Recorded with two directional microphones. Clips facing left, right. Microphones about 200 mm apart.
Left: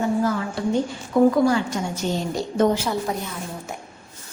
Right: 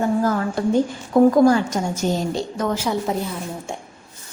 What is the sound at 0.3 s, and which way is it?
Speech, 50° right (ahead or behind).